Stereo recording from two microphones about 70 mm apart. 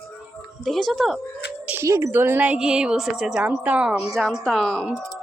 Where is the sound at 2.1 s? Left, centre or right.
Right.